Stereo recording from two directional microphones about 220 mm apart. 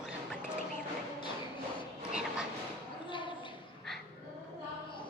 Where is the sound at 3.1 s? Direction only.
20° left (ahead or behind).